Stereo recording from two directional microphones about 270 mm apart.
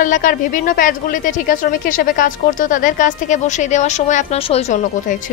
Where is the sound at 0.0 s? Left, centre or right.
Left.